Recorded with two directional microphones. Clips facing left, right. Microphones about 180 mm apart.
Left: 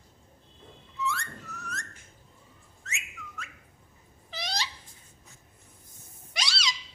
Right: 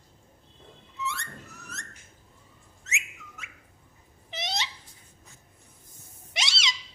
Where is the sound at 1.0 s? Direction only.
25° right (ahead or behind).